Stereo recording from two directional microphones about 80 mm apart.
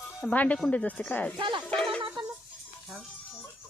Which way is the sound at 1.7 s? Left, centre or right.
Centre.